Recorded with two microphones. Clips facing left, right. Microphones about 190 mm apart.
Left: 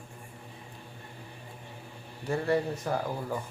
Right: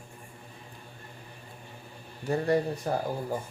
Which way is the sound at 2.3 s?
40° right (ahead or behind).